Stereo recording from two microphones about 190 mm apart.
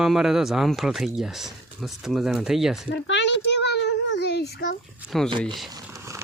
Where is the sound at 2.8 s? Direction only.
65° left (ahead or behind).